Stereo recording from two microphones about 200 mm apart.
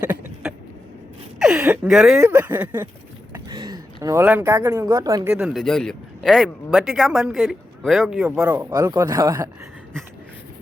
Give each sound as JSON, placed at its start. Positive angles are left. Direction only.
{"t": 0.0, "sound": "vehicle", "side_deg": -5}
{"t": 1.4, "sound": "speech", "side_deg": -5}
{"t": 3.3, "sound": "speech", "side_deg": -20}
{"t": 5.3, "sound": "speech", "side_deg": -5}
{"t": 8.7, "sound": "speech", "side_deg": -15}